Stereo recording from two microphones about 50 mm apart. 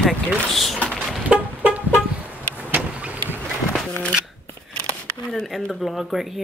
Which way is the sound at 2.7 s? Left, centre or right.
Right.